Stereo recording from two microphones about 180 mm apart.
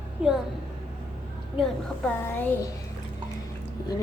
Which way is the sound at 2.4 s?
10° left (ahead or behind).